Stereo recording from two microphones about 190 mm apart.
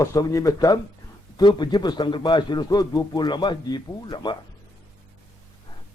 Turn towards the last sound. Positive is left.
turn(degrees=20)  # may be behind; listen again after turning